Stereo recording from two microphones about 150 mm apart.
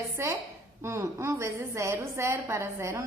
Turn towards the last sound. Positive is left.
turn(degrees=-20)  # may be behind; listen again after turning